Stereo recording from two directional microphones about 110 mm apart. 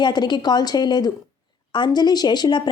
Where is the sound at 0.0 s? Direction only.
40° left (ahead or behind).